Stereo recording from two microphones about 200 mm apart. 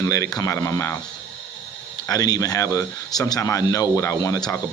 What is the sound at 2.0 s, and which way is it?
Speech, 20° left (ahead or behind).